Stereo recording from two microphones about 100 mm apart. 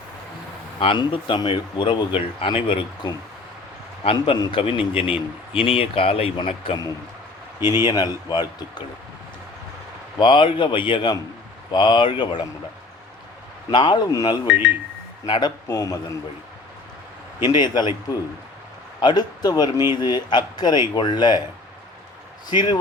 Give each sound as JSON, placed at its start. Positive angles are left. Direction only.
{"t": 0.8, "sound": "a man's voice", "side_deg": 60}
{"t": 4.0, "sound": "speech", "side_deg": 65}
{"t": 7.6, "sound": "speech", "side_deg": -25}
{"t": 7.9, "sound": "a man's voice", "side_deg": 45}
{"t": 10.2, "sound": "a man's voice", "side_deg": 55}
{"t": 13.7, "sound": "a man's voice", "side_deg": 50}
{"t": 14.4, "sound": "speech", "side_deg": -15}
{"t": 15.3, "sound": "a man's voice", "side_deg": 45}
{"t": 15.6, "sound": "a man's voice", "side_deg": 35}
{"t": 17.5, "sound": "a man's voice", "side_deg": 45}
{"t": 22.4, "sound": "a man's voice", "side_deg": 45}